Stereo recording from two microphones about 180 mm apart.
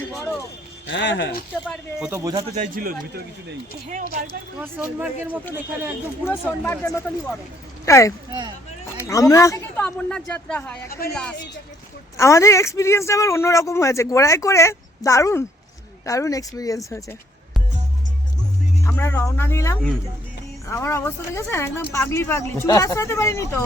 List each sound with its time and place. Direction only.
0.9 s speech: 75° left (ahead or behind)
2.0 s speech: 10° right (ahead or behind)
2.6 s speech: 50° right (ahead or behind)
4.6 s speech: 10° right (ahead or behind)
6.2 s speech: 15° left (ahead or behind)
8.3 s speech: 25° right (ahead or behind)
9.0 s speech: 20° left (ahead or behind)
9.8 s speech: 5° left (ahead or behind)
18.8 s speech: 15° left (ahead or behind)